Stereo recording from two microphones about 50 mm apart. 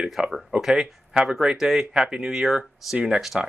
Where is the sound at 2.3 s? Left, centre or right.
Centre.